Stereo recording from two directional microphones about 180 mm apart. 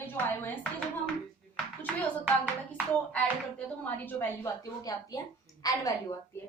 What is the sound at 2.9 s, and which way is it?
A woman's voice, 5° left (ahead or behind).